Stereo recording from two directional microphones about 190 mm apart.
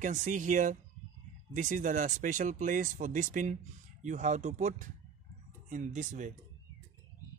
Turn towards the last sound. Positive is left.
turn(degrees=-40)  # may be behind; listen again after turning